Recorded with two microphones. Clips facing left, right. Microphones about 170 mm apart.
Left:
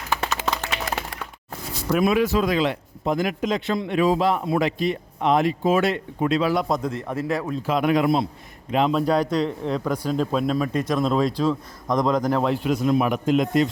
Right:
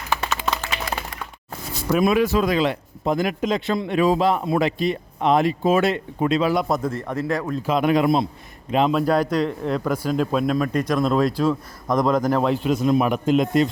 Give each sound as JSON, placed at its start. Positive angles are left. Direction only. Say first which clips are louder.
{"t": 0.2, "sound": "a sound", "louder": "right 1 dB", "side_deg": 80}
{"t": 2.0, "sound": "a man's voice", "louder": "right 1 dB", "side_deg": -50}
{"t": 4.2, "sound": "speech", "louder": "right 1 dB", "side_deg": -25}
{"t": 5.8, "sound": "speech", "louder": "right 1 dB", "side_deg": -25}
{"t": 6.7, "sound": "a man's voice", "louder": "right 1 dB", "side_deg": -5}
{"t": 7.7, "sound": "speech", "louder": "right 1 dB", "side_deg": -25}
{"t": 8.9, "sound": "a man's voice", "louder": "right 1 dB", "side_deg": -5}
{"t": 12.6, "sound": "speech", "louder": "right 1 dB", "side_deg": -25}